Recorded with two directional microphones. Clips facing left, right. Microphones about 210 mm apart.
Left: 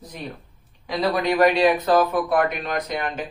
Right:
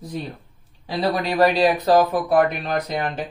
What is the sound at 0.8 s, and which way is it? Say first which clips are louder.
Speech: even; 30° right (ahead or behind).